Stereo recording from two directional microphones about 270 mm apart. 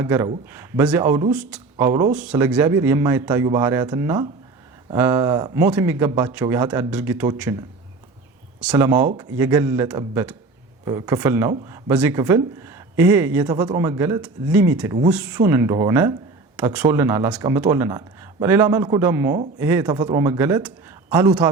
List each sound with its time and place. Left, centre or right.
0.0 s speech: centre
8.6 s speech: centre